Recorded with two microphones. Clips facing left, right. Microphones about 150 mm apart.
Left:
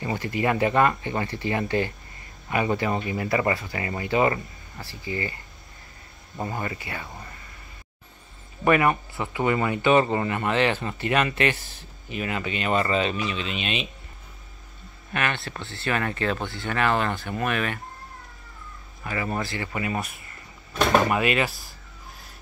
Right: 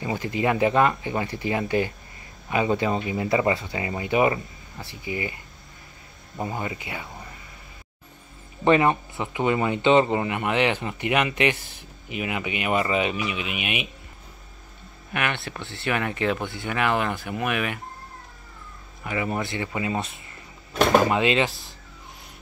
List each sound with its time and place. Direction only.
0.0 s speech: 20° right (ahead or behind)
6.5 s speech: 15° right (ahead or behind)
7.1 s speech: centre (ahead or behind)
8.6 s speech: 25° right (ahead or behind)
15.1 s speech: 15° right (ahead or behind)
19.0 s speech: 15° right (ahead or behind)